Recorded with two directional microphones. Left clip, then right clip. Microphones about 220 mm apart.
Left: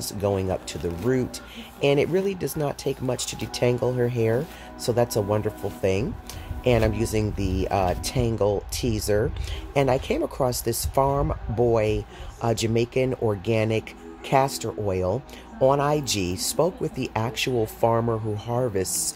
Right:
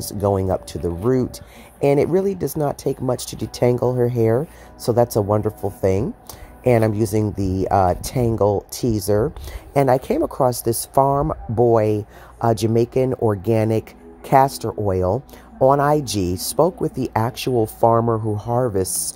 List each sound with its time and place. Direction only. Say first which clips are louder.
0.0 s speech: right 5 dB; 15° right (ahead or behind)